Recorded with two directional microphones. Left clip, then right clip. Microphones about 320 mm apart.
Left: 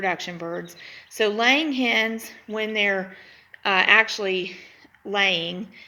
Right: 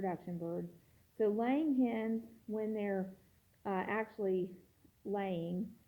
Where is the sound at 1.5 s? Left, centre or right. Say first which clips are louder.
Left 14 dB; centre.